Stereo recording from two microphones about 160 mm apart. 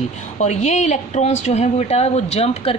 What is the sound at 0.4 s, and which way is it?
A woman's voice, 45° left (ahead or behind).